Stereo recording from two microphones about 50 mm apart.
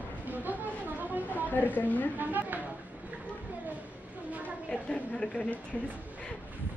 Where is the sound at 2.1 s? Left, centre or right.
Right.